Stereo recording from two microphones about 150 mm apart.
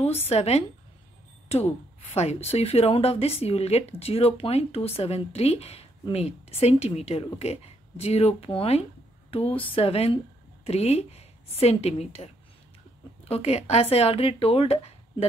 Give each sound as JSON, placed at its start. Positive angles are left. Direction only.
{"t": 0.3, "sound": "a woman's voice", "side_deg": 45}